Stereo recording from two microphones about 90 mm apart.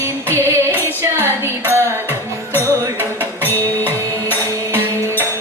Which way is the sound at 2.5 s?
25° left (ahead or behind).